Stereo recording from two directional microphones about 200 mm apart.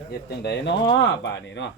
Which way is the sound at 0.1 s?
55° left (ahead or behind).